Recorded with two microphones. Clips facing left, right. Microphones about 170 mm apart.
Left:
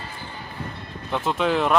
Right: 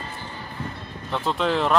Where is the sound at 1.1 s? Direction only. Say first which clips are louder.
Left 1 dB; 10° left (ahead or behind).